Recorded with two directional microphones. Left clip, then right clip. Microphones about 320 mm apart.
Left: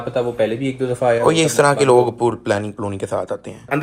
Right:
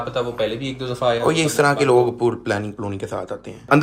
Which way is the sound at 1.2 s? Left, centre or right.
Centre.